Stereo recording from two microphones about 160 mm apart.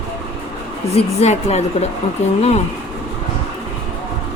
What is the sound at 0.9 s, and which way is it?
A woman's voice, 40° left (ahead or behind).